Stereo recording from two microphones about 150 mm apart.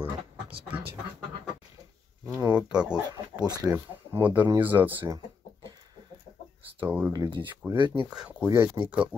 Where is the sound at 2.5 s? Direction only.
5° right (ahead or behind).